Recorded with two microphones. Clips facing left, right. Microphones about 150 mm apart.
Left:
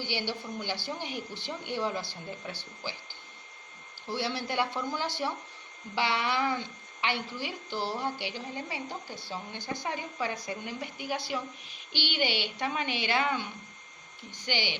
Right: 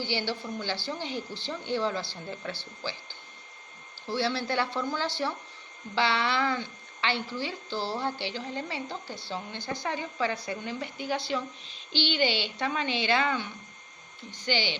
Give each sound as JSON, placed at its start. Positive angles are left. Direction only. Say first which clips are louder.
{"t": 0.0, "sound": "a woman's voice", "louder": "right 3 dB", "side_deg": 15}
{"t": 4.1, "sound": "a woman's voice", "louder": "right 3 dB", "side_deg": 15}